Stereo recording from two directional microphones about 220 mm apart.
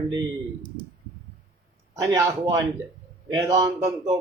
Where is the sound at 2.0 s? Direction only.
15° right (ahead or behind).